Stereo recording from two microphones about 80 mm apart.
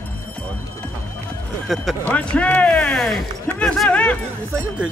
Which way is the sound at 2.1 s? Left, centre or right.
Centre.